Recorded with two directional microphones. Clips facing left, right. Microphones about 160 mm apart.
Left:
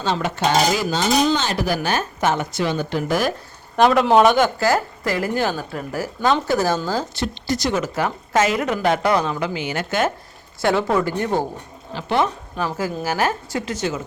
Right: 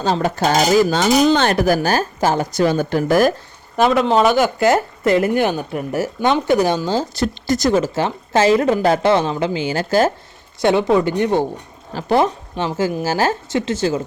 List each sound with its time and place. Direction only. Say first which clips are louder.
0.0 s cutlery: right 3 dB; 40° right (ahead or behind)
0.9 s speech: right 4 dB; 55° right (ahead or behind)
3.8 s speech: even; centre (ahead or behind)
4.6 s speech: right 4 dB; 25° right (ahead or behind)
7.1 s speech: right 5 dB; 45° right (ahead or behind)
7.7 s speech: right 6 dB; 30° right (ahead or behind)
10.6 s speech: right 4 dB; 20° right (ahead or behind)
11.9 s speech: right 4 dB; 40° right (ahead or behind)